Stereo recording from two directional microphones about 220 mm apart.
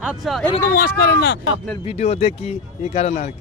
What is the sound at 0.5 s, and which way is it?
Speech, 40° left (ahead or behind).